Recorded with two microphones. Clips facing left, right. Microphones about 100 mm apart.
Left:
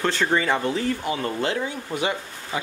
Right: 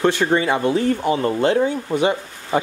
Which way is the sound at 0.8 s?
40° right (ahead or behind).